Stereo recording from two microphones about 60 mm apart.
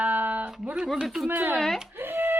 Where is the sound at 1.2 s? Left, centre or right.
Right.